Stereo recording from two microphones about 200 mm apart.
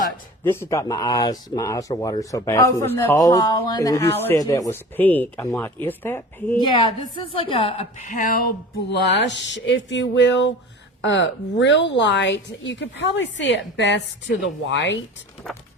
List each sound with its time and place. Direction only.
0.4 s speech: 10° left (ahead or behind)
6.6 s a woman's voice: 20° left (ahead or behind); by 8.4 s 45° left (ahead or behind)
8.9 s a woman's voice: 60° left (ahead or behind)
15.4 s music: 5° left (ahead or behind)